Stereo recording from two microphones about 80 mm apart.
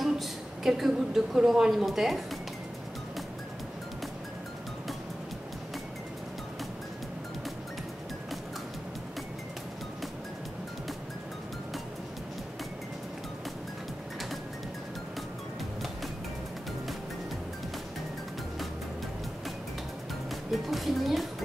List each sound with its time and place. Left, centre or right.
0.0 s speech: centre
20.5 s music: centre